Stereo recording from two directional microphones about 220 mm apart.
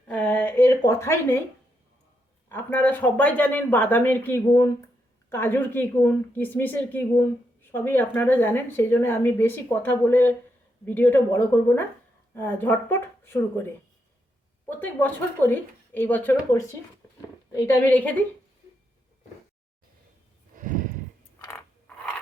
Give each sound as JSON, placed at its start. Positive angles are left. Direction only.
{"t": 0.1, "sound": "a sound", "side_deg": 5}
{"t": 2.5, "sound": "speech", "side_deg": 10}
{"t": 14.7, "sound": "speech", "side_deg": 10}
{"t": 17.5, "sound": "speech", "side_deg": 10}
{"t": 20.6, "sound": "livestock", "side_deg": -35}
{"t": 21.4, "sound": "a sound", "side_deg": 10}